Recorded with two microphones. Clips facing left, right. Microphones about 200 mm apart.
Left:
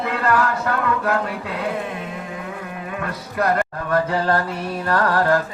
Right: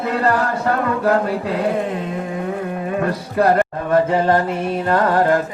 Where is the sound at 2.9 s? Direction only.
30° right (ahead or behind).